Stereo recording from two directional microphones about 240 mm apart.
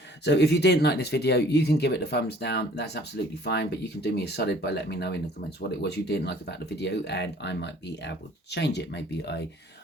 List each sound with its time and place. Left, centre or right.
0.3 s speech: left